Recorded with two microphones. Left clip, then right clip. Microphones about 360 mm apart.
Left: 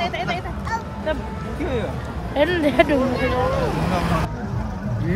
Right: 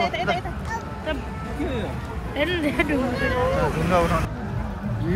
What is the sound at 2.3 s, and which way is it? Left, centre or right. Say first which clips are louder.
Speech: left 5 dB; left.